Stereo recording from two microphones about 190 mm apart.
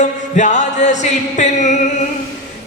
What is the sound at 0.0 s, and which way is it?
Music, 40° left (ahead or behind).